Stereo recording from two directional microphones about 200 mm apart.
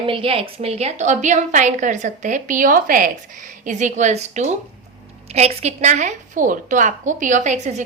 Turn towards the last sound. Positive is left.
turn(degrees=-35)  # may be behind; listen again after turning